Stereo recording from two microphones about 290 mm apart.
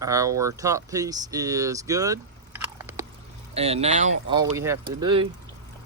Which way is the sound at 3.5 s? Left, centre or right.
Right.